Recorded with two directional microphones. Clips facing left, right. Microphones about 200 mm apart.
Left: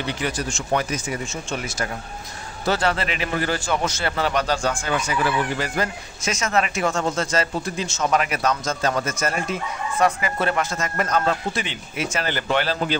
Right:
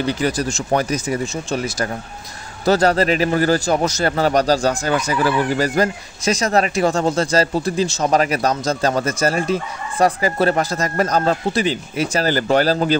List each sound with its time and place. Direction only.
0.0 s a man's voice: 40° right (ahead or behind)